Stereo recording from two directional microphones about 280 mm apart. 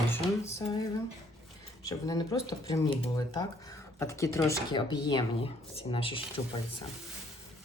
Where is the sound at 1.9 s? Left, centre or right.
Centre.